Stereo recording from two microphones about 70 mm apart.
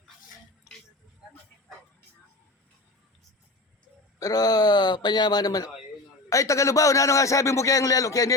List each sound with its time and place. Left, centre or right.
4.2 s speech: left
6.3 s a man's voice: left